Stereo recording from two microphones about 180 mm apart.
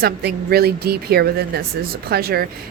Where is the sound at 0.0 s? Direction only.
60° right (ahead or behind).